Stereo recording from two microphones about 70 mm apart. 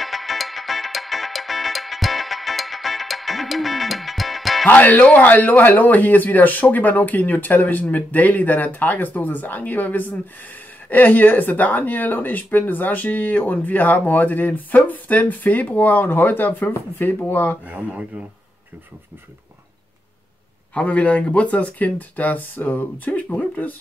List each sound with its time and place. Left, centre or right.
0.0 s music: centre
4.6 s speech: left
17.6 s speech: centre
20.7 s speech: centre